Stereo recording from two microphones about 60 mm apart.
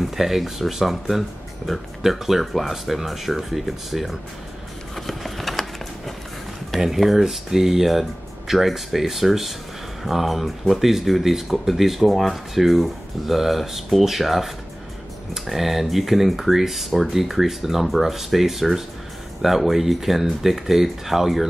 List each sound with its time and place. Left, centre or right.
0.0 s speech: centre
4.9 s a sound: centre
6.7 s speech: centre